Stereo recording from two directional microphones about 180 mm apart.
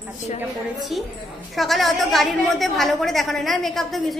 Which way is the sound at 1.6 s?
Centre (ahead or behind).